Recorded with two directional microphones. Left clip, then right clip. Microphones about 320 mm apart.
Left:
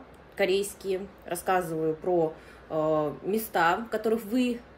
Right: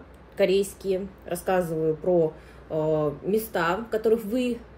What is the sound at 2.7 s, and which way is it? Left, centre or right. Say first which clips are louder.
Speech: right 2 dB; centre.